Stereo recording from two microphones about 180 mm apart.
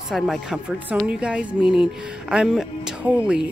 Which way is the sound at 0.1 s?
Centre (ahead or behind).